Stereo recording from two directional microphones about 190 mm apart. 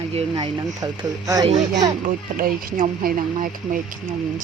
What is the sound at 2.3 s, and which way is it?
Speech, 50° right (ahead or behind).